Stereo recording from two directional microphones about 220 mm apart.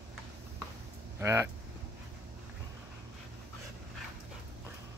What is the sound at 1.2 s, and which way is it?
Speech, 10° right (ahead or behind).